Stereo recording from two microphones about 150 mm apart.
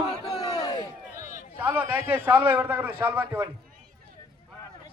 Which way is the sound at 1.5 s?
10° right (ahead or behind).